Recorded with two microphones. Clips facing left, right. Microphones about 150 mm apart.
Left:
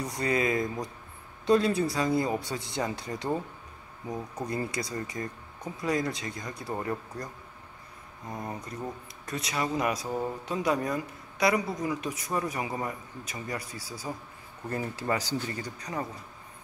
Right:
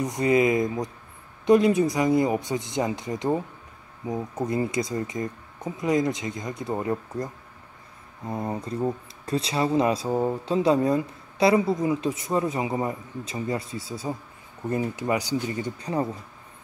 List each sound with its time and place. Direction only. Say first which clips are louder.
0.0 s speech: right 7 dB; 20° right (ahead or behind)
8.3 s speech: right 7 dB; 25° right (ahead or behind)